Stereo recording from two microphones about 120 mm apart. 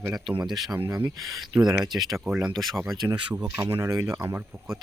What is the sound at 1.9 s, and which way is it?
Speech, 35° right (ahead or behind).